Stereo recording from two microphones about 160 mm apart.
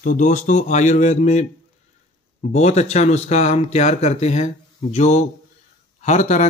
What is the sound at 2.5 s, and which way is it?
Speech, 45° left (ahead or behind).